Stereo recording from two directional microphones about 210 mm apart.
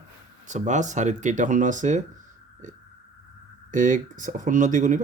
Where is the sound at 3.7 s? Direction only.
40° right (ahead or behind).